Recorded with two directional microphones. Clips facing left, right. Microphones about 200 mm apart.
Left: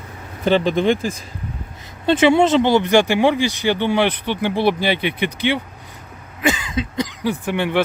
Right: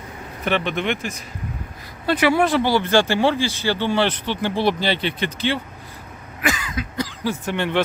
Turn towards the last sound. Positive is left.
turn(degrees=10)  # may be behind; listen again after turning